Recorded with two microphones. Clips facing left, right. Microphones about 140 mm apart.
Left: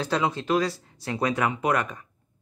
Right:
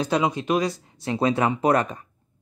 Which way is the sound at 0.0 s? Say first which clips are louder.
Right 3 dB; 15° right (ahead or behind).